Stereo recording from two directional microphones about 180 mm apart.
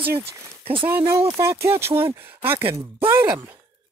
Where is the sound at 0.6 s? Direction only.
30° right (ahead or behind).